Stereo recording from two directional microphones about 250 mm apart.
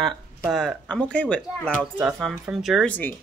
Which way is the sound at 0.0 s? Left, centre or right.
Centre.